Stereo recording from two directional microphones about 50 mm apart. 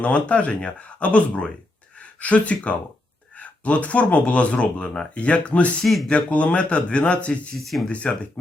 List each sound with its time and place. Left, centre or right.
0.0 s speech: left
5.8 s speech: centre
6.1 s speech: left
7.5 s speech: centre
7.9 s speech: left